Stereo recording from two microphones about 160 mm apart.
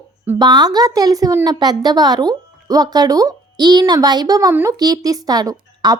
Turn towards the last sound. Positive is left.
turn(degrees=-25)  # may be behind; listen again after turning